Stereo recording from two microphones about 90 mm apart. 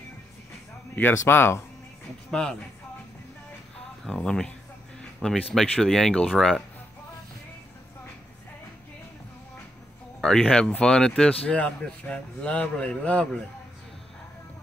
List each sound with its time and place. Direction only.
1.1 s speech: 25° left (ahead or behind)
4.0 s speech: 10° left (ahead or behind)
10.2 s speech: 5° left (ahead or behind)